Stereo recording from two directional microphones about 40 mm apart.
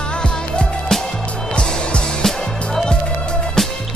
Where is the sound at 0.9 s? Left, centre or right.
Centre.